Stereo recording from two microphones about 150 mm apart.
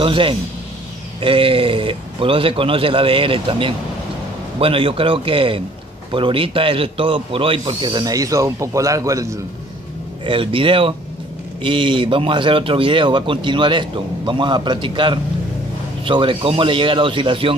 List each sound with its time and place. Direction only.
0.0 s speech: 35° right (ahead or behind); by 9.4 s 20° right (ahead or behind)
10.2 s speech: 35° right (ahead or behind)